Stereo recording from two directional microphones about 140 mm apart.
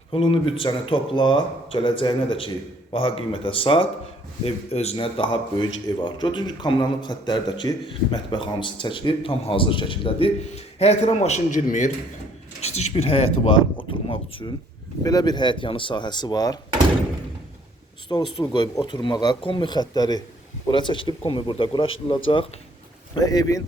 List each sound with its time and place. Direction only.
0.1 s a man's voice: 40° left (ahead or behind); by 11.9 s 65° left (ahead or behind)
12.6 s speech: 50° left (ahead or behind)
15.0 s a man's voice: 30° left (ahead or behind)
18.1 s a man's voice: 35° left (ahead or behind)
23.2 s speech: 25° left (ahead or behind)